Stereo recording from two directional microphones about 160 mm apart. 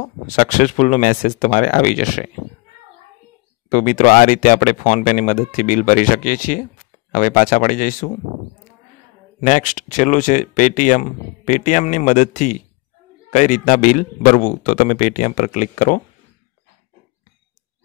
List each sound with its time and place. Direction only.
0.0 s speech: 50° left (ahead or behind)
3.6 s speech: 55° left (ahead or behind)
9.4 s speech: 50° left (ahead or behind)